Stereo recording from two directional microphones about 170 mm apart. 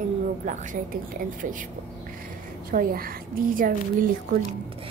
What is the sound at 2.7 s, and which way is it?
A woman's voice, 60° right (ahead or behind).